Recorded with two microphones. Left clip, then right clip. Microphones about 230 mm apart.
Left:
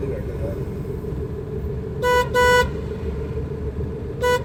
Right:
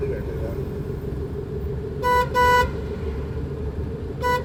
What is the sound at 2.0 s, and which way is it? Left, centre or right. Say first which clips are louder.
Vehicle: left 1 dB; left.